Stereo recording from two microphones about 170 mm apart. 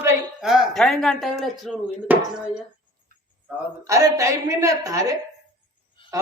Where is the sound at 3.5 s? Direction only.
10° right (ahead or behind).